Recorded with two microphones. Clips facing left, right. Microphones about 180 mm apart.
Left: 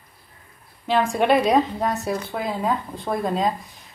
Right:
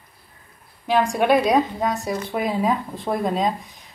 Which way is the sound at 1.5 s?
Centre (ahead or behind).